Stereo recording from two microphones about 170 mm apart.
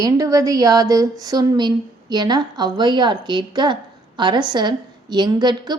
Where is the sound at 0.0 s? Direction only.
20° right (ahead or behind).